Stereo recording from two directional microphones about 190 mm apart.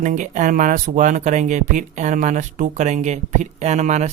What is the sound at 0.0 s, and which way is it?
Speech, 40° right (ahead or behind).